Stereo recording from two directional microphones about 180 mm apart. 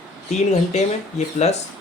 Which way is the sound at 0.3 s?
40° left (ahead or behind).